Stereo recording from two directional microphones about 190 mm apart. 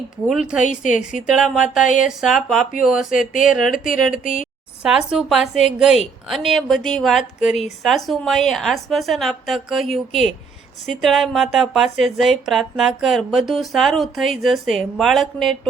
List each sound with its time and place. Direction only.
0.3 s speech: 5° right (ahead or behind)
4.2 s a woman's voice: 45° left (ahead or behind)
4.8 s speech: 5° right (ahead or behind)